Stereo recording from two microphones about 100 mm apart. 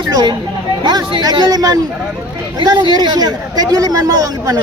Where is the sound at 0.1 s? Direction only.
40° right (ahead or behind).